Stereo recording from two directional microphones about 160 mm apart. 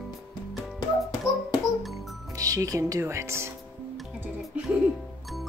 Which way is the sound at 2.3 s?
20° right (ahead or behind).